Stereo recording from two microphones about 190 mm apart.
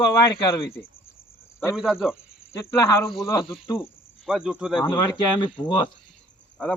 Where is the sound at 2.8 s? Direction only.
15° left (ahead or behind).